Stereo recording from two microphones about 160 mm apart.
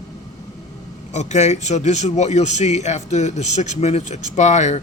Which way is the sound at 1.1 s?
45° left (ahead or behind).